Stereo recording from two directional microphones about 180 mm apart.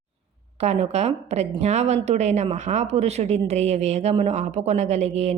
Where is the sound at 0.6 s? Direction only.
35° right (ahead or behind).